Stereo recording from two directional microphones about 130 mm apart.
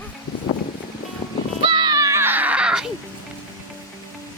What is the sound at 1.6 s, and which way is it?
Music, 35° right (ahead or behind).